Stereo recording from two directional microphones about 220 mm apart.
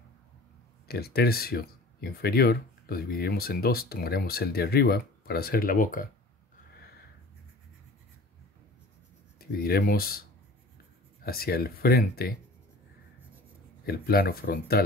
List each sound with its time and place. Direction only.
0.8 s speech: 45° left (ahead or behind)
9.4 s speech: 45° left (ahead or behind)
11.2 s speech: 45° left (ahead or behind)
13.8 s speech: 45° left (ahead or behind)